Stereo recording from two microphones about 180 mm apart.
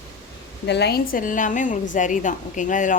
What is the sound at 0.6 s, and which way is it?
A woman's voice, 70° left (ahead or behind).